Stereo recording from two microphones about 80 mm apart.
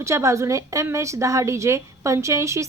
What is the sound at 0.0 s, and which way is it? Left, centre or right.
A woman's voice, right.